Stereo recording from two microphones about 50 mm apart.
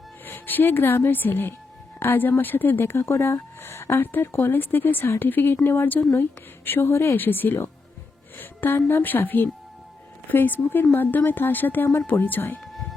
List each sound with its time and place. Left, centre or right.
0.3 s a woman's voice: left
2.8 s speech: left
4.0 s speech: left
7.2 s a woman's voice: left